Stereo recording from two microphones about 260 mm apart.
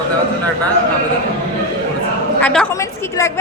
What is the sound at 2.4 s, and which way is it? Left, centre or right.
Speech, centre.